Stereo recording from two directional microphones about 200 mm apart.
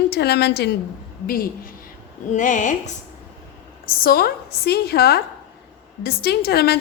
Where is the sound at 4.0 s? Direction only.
50° left (ahead or behind).